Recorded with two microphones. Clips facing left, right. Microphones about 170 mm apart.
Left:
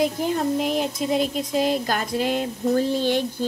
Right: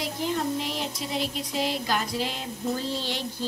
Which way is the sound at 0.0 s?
50° left (ahead or behind).